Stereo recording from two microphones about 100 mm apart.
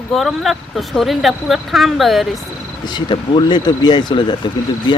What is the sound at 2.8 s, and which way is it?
Speech, 50° left (ahead or behind).